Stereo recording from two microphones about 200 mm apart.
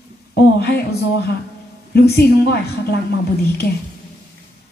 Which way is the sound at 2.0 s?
55° left (ahead or behind).